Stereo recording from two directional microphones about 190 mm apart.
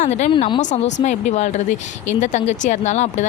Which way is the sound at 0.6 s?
40° left (ahead or behind).